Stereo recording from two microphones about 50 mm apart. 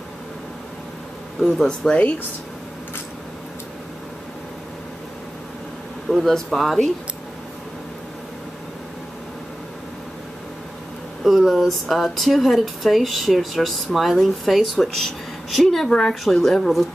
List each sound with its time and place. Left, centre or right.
1.6 s speech: centre
6.0 s speech: centre
11.2 s speech: centre